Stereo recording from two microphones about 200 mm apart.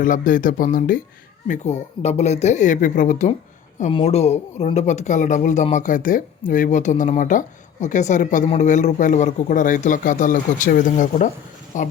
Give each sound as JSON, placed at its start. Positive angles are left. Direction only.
{"t": 0.0, "sound": "speech", "side_deg": 40}